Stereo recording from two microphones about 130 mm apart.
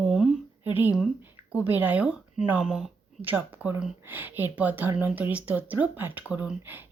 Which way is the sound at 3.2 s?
15° right (ahead or behind).